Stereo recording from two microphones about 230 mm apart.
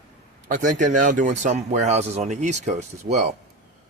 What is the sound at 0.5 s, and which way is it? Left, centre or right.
Speech, right.